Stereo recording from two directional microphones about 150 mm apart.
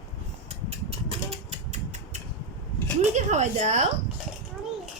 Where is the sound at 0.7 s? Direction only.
45° right (ahead or behind).